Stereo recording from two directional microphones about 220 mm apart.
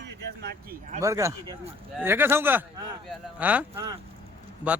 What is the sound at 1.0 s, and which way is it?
A man's voice, 15° right (ahead or behind).